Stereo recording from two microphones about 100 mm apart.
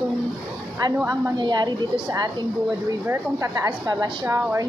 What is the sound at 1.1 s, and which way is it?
Speech, 45° right (ahead or behind).